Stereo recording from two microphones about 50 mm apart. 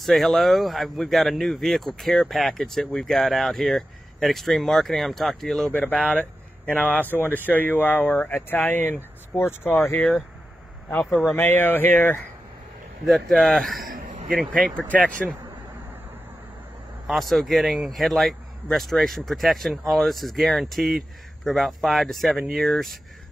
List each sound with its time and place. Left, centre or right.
0.0 s speech: centre
5.7 s speech: left
9.3 s speech: centre
10.9 s speech: left
13.0 s speech: centre
14.9 s speech: left
17.1 s speech: centre